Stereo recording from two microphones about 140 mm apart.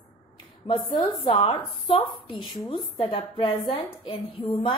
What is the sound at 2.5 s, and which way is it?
Speech, centre (ahead or behind).